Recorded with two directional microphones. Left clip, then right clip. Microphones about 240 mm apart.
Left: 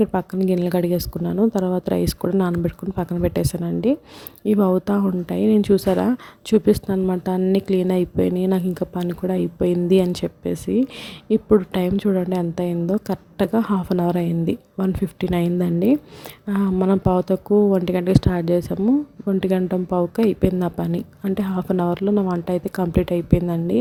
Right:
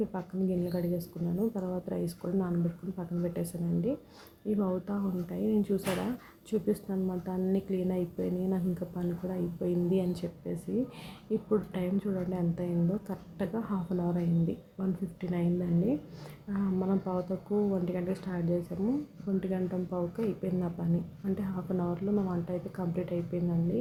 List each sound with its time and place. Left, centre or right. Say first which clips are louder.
0.0 s a woman's voice: left 14 dB; left
16.5 s a woman's voice: left 13 dB; left